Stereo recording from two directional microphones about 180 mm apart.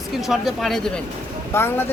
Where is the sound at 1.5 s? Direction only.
15° left (ahead or behind).